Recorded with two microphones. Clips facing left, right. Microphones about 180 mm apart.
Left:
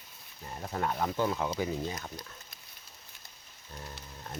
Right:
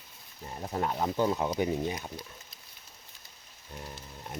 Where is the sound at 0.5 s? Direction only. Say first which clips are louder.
Right 1 dB; 15° right (ahead or behind).